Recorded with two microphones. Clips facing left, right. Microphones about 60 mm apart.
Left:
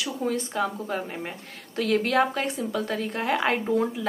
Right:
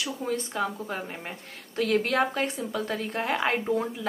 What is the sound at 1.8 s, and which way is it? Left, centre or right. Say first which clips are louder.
Speech: left 2 dB; right.